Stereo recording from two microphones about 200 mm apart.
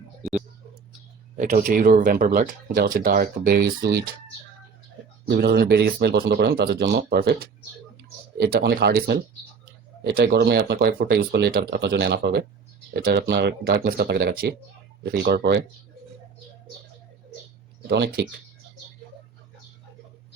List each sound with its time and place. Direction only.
1.4 s speech: 40° right (ahead or behind)
5.3 s speech: 55° right (ahead or behind)
17.8 s speech: 55° right (ahead or behind)